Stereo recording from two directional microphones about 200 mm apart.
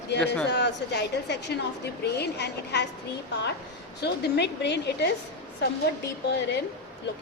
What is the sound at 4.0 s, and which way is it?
A woman's voice, 55° left (ahead or behind).